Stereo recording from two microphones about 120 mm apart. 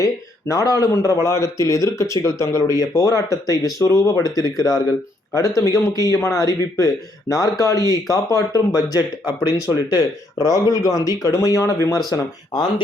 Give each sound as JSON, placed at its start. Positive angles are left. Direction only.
{"t": 0.0, "sound": "speech", "side_deg": 30}